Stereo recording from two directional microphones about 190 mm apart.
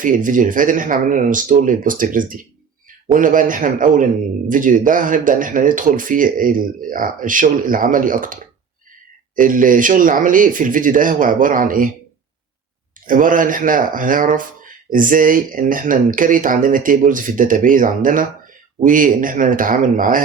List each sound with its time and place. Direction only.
0.0 s a man's voice: 45° right (ahead or behind)
13.1 s a man's voice: 45° right (ahead or behind)